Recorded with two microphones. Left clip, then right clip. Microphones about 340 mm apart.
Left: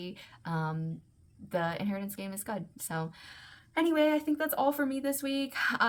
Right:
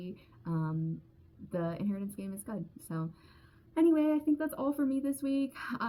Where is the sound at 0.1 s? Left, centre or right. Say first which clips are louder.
Left 3 dB; centre.